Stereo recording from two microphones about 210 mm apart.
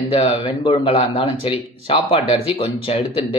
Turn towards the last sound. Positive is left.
turn(degrees=25)  # may be behind; listen again after turning